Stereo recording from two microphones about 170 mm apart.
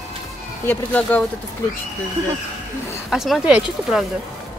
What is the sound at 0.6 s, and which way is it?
Speech, 10° left (ahead or behind).